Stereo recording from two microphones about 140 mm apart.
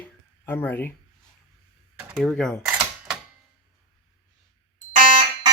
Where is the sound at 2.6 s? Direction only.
5° right (ahead or behind).